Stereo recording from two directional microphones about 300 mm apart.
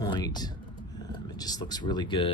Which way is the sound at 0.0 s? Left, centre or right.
Centre.